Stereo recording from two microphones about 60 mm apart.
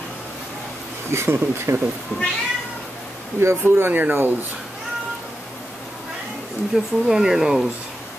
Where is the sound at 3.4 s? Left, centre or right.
Right.